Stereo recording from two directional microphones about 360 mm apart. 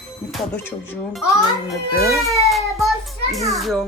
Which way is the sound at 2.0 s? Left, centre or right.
Centre.